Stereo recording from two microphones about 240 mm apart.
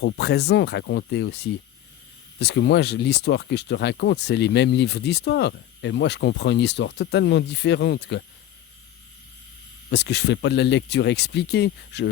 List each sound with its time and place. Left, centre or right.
0.0 s speech: left
2.4 s speech: left
9.9 s speech: left